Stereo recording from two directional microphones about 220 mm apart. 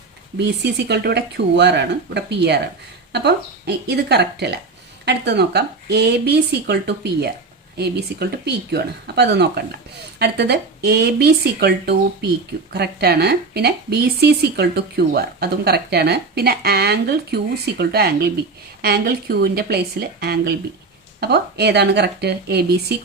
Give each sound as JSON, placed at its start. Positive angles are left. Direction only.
{"t": 0.3, "sound": "speech", "side_deg": -50}